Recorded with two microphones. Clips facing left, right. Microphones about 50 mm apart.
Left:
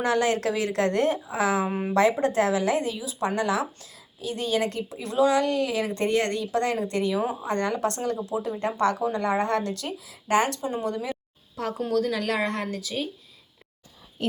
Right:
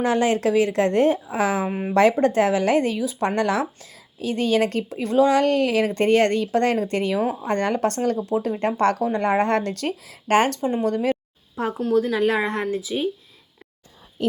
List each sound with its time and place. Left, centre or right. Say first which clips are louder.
0.0 s a woman's voice: right 3 dB; right
1.6 s speech: right 2 dB; centre
2.2 s speech: right 4 dB; right
3.8 s speech: right 6 dB; right
10.6 s speech: right 6 dB; right
11.9 s a woman's voice: right 6 dB; centre